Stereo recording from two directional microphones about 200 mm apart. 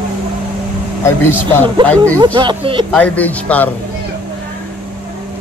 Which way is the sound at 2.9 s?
10° left (ahead or behind).